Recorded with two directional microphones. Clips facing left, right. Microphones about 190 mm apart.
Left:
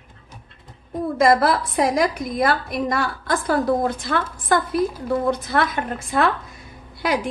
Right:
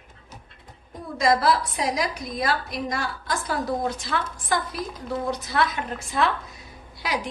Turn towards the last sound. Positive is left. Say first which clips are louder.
# left 6 dB
turn(degrees=55)  # may be behind; listen again after turning